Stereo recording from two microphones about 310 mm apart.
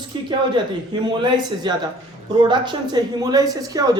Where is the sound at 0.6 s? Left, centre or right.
Centre.